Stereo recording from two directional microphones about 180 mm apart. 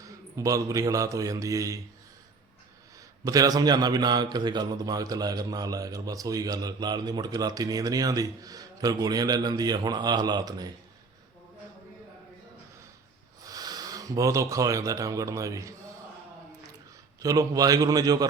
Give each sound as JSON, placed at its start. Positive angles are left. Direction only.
{"t": 0.0, "sound": "a man's voice", "side_deg": -20}
{"t": 3.2, "sound": "speech", "side_deg": -20}
{"t": 13.4, "sound": "speech", "side_deg": -20}
{"t": 17.2, "sound": "speech", "side_deg": -20}